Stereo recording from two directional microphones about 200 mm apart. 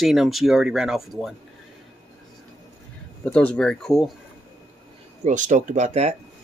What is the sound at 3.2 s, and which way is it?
Speech, 5° left (ahead or behind).